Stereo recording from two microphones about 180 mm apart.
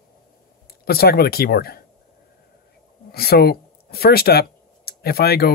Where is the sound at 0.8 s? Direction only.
60° left (ahead or behind).